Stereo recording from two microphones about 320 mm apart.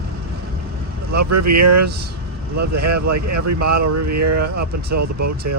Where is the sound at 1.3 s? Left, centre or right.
Right.